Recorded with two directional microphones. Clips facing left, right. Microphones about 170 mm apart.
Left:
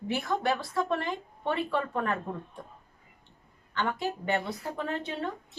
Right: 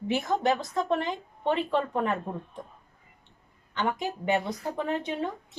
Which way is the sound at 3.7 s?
15° right (ahead or behind).